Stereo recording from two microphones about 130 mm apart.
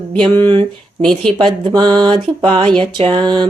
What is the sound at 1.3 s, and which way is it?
Speech, 35° right (ahead or behind).